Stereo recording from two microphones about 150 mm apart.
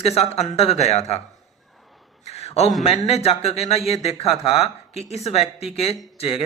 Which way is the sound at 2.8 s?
45° left (ahead or behind).